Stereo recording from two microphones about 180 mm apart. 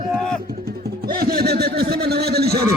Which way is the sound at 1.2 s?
60° right (ahead or behind).